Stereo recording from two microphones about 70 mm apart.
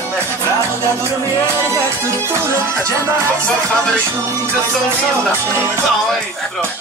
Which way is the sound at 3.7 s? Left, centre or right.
Centre.